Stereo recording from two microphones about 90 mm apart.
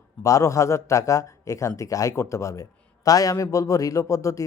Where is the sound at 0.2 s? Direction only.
35° left (ahead or behind).